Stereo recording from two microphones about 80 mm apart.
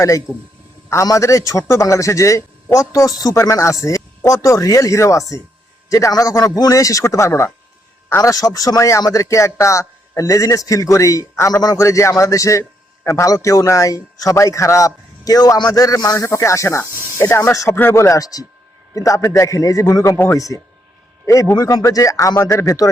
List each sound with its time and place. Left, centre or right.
0.0 s a man's voice: left
16.2 s a man's voice: left